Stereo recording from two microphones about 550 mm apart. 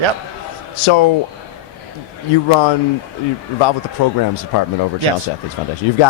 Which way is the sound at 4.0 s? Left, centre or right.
Left.